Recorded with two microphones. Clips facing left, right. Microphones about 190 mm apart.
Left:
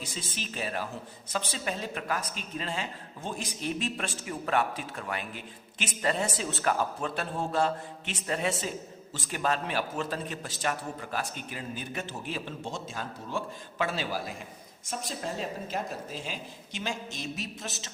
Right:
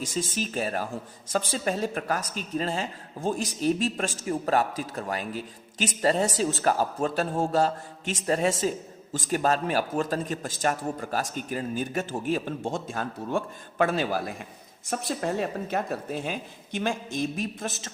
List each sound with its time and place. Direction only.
0.0 s a man's voice: 45° right (ahead or behind)